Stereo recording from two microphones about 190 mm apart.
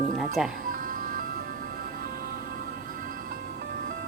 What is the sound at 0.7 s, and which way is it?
Music, 45° right (ahead or behind).